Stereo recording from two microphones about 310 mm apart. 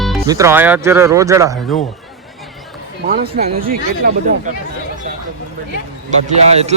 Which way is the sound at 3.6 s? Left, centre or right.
Right.